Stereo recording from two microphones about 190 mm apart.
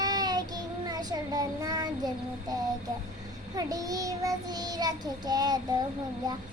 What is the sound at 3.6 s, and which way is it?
Child singing, 20° right (ahead or behind).